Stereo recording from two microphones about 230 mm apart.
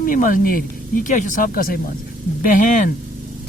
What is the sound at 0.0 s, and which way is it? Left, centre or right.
Speech, left.